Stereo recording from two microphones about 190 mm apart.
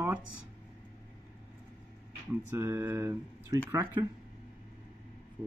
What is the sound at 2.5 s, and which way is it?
Speech, 15° right (ahead or behind).